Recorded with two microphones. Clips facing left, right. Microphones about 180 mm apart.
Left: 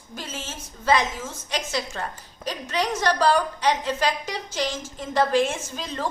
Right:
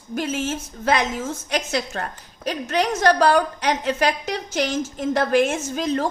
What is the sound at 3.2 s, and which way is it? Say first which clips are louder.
Speech: right 2 dB; 65° right (ahead or behind).